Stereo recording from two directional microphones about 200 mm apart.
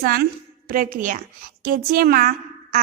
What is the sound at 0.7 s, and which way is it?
A woman's voice, 45° right (ahead or behind).